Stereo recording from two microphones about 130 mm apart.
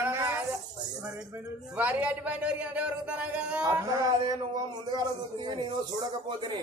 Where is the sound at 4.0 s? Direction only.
30° right (ahead or behind).